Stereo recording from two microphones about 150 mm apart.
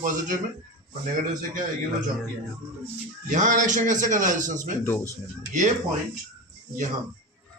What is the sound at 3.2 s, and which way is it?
A man's voice, 55° right (ahead or behind).